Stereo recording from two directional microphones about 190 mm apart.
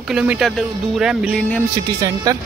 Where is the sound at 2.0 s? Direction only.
20° right (ahead or behind).